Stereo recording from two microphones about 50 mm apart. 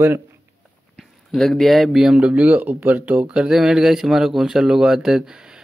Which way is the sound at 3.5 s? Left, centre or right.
Centre.